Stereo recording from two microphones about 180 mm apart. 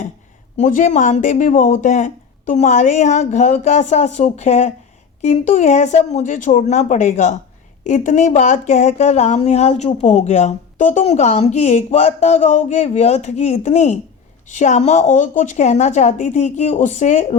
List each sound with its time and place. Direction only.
0.5 s speech: 45° left (ahead or behind)